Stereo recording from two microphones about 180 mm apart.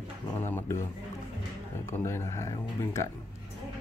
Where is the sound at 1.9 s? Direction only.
15° left (ahead or behind).